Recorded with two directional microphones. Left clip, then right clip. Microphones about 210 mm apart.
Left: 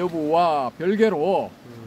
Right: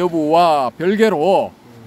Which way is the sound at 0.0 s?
35° right (ahead or behind).